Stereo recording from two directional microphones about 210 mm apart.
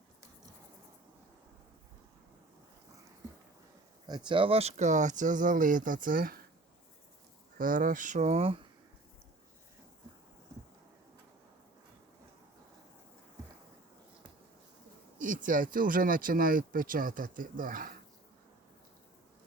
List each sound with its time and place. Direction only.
4.0 s speech: 20° right (ahead or behind); by 6.4 s 40° right (ahead or behind)
7.6 s speech: 40° right (ahead or behind)
15.2 s speech: 40° right (ahead or behind)